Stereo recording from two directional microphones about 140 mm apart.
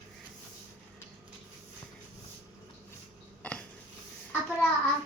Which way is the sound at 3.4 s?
10° left (ahead or behind).